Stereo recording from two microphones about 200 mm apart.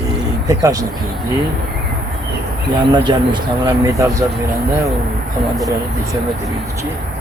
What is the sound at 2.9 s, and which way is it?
Speech, 20° right (ahead or behind).